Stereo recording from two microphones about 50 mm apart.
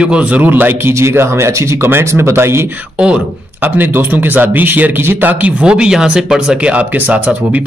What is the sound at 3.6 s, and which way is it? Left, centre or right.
Speech, right.